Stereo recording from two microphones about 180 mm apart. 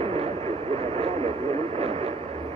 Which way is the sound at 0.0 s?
35° right (ahead or behind).